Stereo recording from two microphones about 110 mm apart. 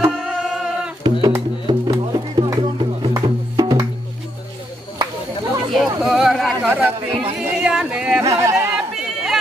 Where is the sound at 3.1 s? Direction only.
35° right (ahead or behind).